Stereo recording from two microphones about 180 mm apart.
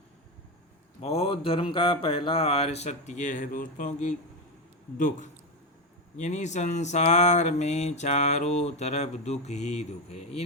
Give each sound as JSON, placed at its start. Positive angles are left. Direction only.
{"t": 1.0, "sound": "a man's voice", "side_deg": 35}